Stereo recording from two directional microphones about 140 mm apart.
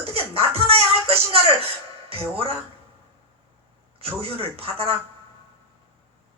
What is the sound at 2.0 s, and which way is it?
Speech, 45° right (ahead or behind).